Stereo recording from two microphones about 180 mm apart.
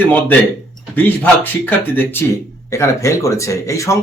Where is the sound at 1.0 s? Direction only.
10° left (ahead or behind).